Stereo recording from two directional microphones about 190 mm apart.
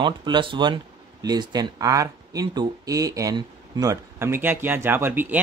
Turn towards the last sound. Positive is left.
turn(degrees=-10)  # may be behind; listen again after turning